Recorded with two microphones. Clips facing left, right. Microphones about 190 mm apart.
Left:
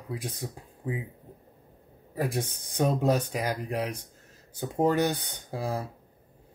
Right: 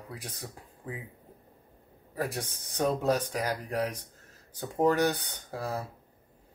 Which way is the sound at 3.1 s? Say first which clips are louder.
Left 1 dB; 20° left (ahead or behind).